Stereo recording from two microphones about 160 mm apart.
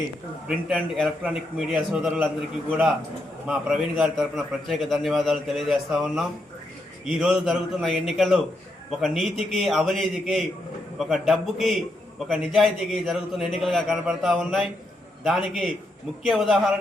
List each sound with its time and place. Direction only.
0.4 s a man's voice: 5° right (ahead or behind)